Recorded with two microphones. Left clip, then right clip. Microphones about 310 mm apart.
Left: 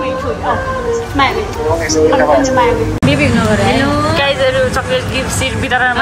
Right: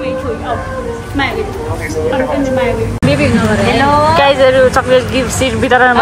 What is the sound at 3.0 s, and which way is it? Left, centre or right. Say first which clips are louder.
Speech: right 2 dB; centre.